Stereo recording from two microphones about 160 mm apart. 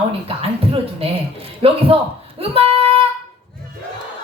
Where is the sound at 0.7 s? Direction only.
35° right (ahead or behind).